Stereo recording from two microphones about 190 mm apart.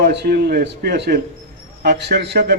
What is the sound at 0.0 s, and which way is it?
Speech, 55° right (ahead or behind).